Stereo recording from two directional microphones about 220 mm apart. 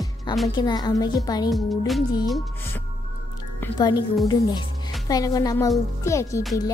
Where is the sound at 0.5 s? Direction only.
20° left (ahead or behind).